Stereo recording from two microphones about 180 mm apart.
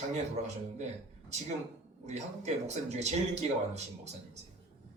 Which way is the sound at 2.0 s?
40° right (ahead or behind).